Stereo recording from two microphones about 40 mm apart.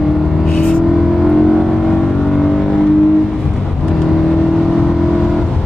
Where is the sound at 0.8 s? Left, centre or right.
Centre.